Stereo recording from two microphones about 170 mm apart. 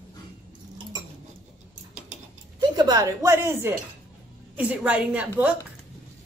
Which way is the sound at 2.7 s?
25° right (ahead or behind).